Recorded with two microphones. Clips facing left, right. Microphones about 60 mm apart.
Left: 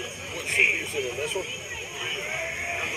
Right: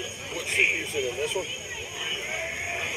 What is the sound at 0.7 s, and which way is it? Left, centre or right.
Speech, centre.